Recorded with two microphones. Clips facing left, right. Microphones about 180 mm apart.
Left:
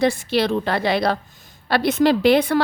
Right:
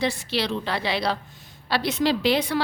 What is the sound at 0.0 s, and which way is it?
A woman's voice, 50° left (ahead or behind).